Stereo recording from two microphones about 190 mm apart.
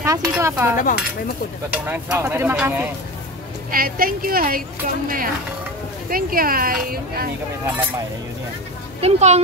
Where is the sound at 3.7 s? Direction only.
50° right (ahead or behind).